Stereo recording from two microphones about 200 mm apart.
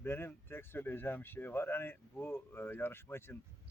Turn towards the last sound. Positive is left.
turn(degrees=10)  # may be behind; listen again after turning